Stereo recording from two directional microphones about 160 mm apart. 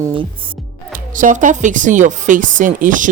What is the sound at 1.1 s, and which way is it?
Speech, 55° right (ahead or behind).